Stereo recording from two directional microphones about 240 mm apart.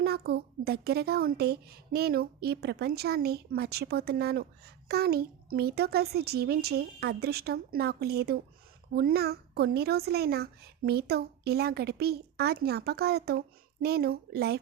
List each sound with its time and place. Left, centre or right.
0.0 s a woman's voice: right